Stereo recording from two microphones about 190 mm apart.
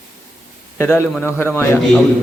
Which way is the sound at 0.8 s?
10° left (ahead or behind).